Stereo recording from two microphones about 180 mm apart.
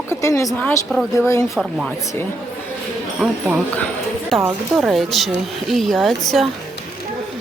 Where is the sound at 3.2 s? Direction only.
5° right (ahead or behind).